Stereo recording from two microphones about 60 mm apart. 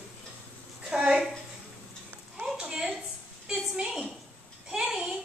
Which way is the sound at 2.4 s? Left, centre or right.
Centre.